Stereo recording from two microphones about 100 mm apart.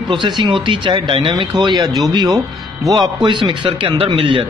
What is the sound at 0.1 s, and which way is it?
Speech, 50° right (ahead or behind).